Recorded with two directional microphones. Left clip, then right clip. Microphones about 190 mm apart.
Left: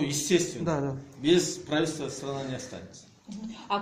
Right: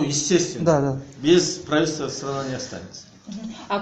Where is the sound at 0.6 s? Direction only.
55° right (ahead or behind).